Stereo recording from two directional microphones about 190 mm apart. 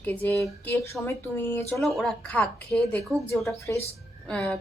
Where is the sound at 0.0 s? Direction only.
10° left (ahead or behind).